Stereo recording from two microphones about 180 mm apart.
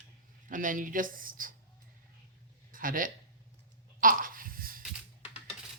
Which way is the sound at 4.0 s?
50° right (ahead or behind).